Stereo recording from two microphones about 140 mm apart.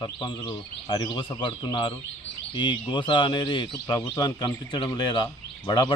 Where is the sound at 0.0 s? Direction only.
30° left (ahead or behind).